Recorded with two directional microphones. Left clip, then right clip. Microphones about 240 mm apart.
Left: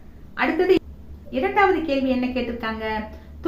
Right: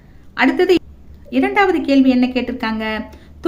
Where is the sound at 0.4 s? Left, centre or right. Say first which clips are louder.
Right 5 dB; right.